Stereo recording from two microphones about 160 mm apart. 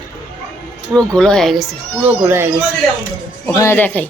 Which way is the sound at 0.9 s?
5° left (ahead or behind).